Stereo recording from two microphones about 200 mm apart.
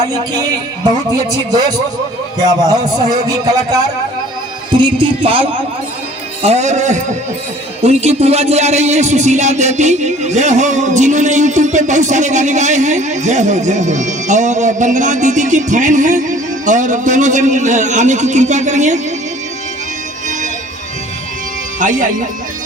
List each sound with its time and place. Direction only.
2.4 s a man's voice: 20° right (ahead or behind); by 18.9 s 35° right (ahead or behind)
21.8 s speech: 40° right (ahead or behind)